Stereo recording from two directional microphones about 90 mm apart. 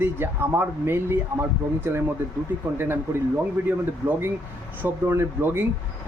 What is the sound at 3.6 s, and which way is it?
Speech, 25° right (ahead or behind).